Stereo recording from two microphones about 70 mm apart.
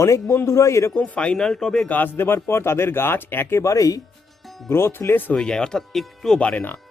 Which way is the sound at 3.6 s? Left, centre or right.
Left.